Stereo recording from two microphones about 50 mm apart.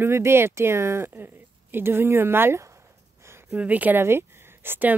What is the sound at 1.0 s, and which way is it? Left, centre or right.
Speech, right.